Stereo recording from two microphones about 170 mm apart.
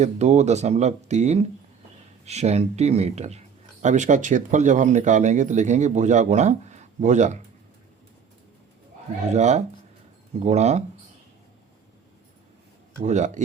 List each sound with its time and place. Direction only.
0.0 s speech: 40° right (ahead or behind)
9.3 s speech: 40° right (ahead or behind)
13.0 s speech: 45° right (ahead or behind)